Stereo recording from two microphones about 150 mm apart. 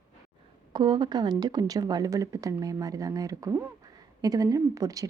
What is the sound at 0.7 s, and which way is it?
A woman's voice, 30° right (ahead or behind).